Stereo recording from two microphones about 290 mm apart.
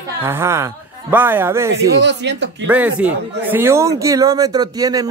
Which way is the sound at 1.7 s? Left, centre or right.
Right.